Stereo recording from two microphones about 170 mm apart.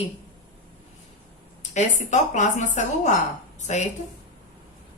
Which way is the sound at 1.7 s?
45° left (ahead or behind).